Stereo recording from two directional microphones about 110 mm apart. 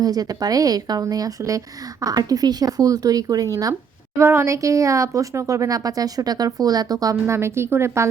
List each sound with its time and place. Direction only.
0.0 s speech: 35° right (ahead or behind)